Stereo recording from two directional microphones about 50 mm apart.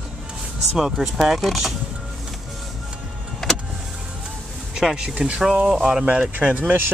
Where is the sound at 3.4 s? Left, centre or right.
Centre.